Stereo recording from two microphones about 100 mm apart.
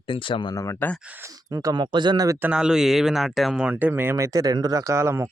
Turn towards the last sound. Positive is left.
turn(degrees=-30)  # may be behind; listen again after turning